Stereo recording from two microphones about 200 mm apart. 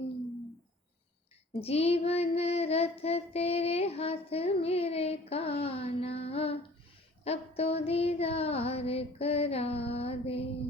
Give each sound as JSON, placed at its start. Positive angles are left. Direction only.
{"t": 1.6, "sound": "child singing", "side_deg": 30}
{"t": 7.3, "sound": "female singing", "side_deg": 30}